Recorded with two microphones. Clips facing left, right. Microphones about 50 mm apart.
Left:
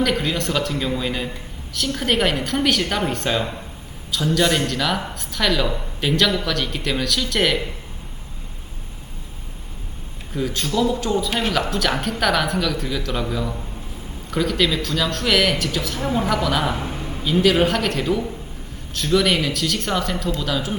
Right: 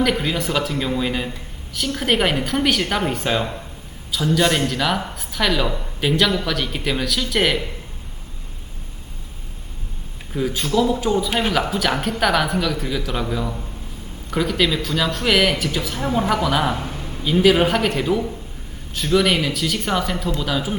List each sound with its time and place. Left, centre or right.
0.0 s speech: centre
10.3 s speech: centre
16.8 s a sound: centre
17.2 s speech: centre